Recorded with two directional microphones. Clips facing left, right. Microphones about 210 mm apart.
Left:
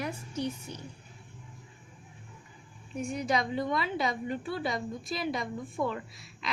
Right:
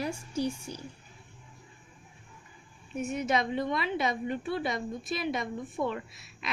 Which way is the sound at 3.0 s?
20° right (ahead or behind).